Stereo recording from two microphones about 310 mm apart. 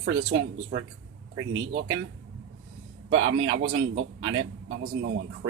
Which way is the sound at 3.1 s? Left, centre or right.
Right.